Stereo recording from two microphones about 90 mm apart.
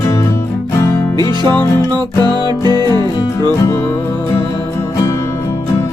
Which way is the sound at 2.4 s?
55° right (ahead or behind).